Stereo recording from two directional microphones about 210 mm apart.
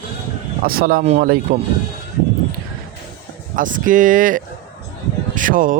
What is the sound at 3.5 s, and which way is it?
Speech, 40° right (ahead or behind).